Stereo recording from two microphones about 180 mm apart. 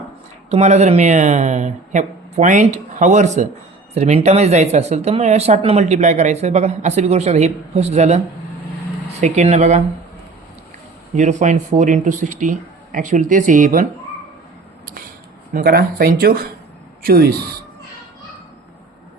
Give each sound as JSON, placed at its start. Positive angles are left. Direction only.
{"t": 0.5, "sound": "speech", "side_deg": -40}
{"t": 9.2, "sound": "speech", "side_deg": -40}
{"t": 11.1, "sound": "speech", "side_deg": -40}
{"t": 15.5, "sound": "speech", "side_deg": -60}